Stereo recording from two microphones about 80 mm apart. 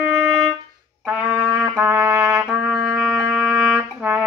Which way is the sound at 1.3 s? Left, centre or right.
Right.